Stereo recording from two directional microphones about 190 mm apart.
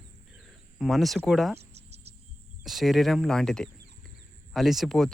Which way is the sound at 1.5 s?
35° right (ahead or behind).